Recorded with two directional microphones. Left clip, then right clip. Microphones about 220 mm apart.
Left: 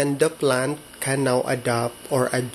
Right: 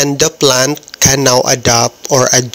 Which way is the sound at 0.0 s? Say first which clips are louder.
Right 9 dB; 40° right (ahead or behind).